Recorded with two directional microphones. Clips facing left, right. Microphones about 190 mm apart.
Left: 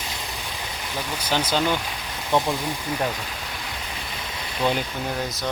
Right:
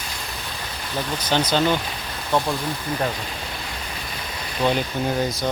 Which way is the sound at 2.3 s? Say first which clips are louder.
Even; 20° left (ahead or behind).